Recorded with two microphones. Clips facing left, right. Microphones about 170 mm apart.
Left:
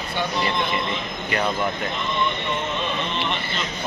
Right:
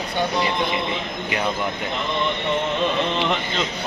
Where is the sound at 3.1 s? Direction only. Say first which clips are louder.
Right 4 dB; 90° right.